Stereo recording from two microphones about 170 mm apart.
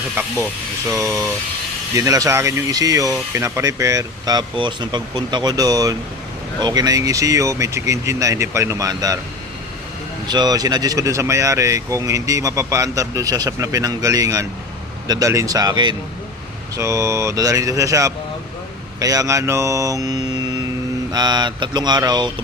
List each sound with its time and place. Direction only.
0.2 s speech: 15° right (ahead or behind)
2.0 s speech: 20° right (ahead or behind)
10.2 s speech: 25° right (ahead or behind)